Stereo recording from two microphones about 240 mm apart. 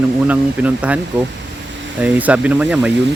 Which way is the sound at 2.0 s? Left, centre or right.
Centre.